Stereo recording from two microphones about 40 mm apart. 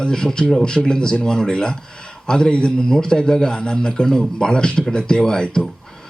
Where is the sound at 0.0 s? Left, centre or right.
Centre.